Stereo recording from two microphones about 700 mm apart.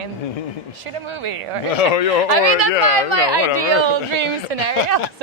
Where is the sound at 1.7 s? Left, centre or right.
Left.